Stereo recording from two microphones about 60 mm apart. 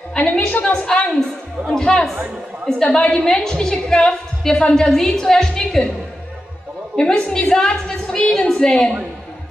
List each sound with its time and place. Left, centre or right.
0.1 s a sound: left
0.5 s a woman's voice: centre
7.0 s a woman's voice: centre